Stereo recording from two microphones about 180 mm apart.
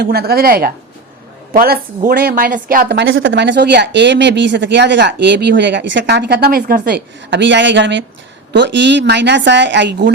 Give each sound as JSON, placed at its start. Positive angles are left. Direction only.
{"t": 0.0, "sound": "a woman's voice", "side_deg": -60}